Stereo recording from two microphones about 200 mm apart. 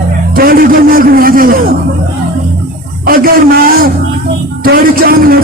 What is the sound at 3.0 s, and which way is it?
Speech, 45° right (ahead or behind).